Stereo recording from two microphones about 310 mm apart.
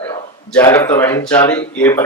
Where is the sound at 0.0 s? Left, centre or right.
Centre.